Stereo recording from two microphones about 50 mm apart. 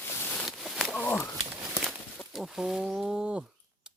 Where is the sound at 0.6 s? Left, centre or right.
Centre.